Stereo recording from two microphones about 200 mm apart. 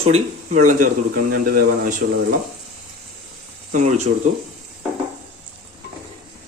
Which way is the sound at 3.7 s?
35° right (ahead or behind).